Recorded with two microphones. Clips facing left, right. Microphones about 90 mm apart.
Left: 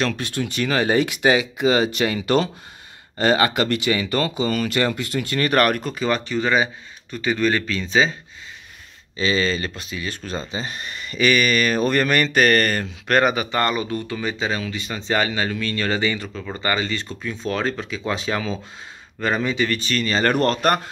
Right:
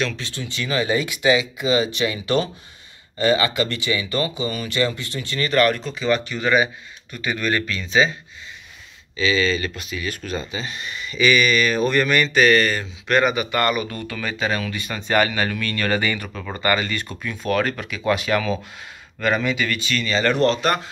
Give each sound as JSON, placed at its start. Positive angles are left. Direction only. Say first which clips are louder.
{"t": 0.0, "sound": "speech", "louder": "left 3 dB", "side_deg": 50}
{"t": 9.1, "sound": "speech", "louder": "right 1 dB", "side_deg": 40}